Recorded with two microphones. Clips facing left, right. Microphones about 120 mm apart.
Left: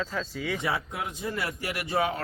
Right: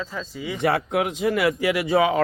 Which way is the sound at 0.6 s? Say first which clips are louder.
Right 9 dB; 70° right (ahead or behind).